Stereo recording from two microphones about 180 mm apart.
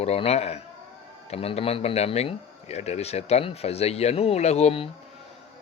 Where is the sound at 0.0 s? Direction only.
35° left (ahead or behind).